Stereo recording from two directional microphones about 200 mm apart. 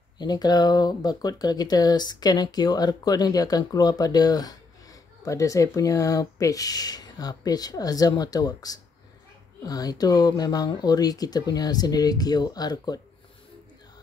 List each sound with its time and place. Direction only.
0.2 s speech: 20° left (ahead or behind)